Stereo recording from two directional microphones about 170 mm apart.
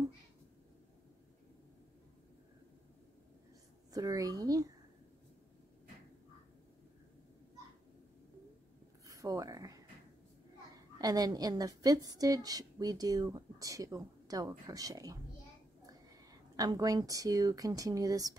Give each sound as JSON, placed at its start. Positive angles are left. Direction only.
{"t": 3.9, "sound": "a woman's voice", "side_deg": -20}
{"t": 9.0, "sound": "a sound", "side_deg": -20}
{"t": 11.0, "sound": "a woman's voice", "side_deg": -20}